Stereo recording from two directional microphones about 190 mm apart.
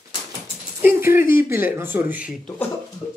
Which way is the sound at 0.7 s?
10° right (ahead or behind).